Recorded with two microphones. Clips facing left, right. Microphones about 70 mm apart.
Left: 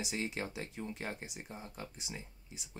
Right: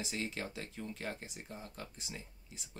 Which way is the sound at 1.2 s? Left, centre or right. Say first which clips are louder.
Left 1 dB; centre.